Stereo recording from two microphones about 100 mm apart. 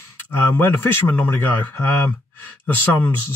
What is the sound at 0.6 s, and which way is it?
Speech, 20° left (ahead or behind).